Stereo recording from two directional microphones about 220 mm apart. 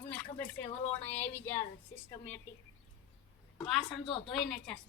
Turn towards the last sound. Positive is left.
turn(degrees=5)  # may be behind; listen again after turning